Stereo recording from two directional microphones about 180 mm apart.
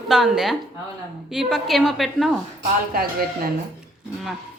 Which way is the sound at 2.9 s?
55° right (ahead or behind).